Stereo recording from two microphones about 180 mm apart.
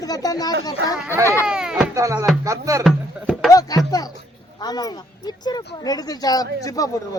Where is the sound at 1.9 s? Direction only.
20° right (ahead or behind).